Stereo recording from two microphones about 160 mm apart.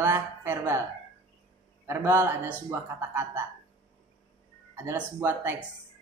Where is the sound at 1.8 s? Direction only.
15° right (ahead or behind).